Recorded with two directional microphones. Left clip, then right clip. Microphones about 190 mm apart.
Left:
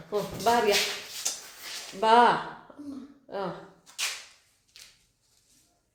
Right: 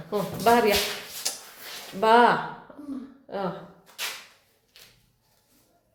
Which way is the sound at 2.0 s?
25° left (ahead or behind).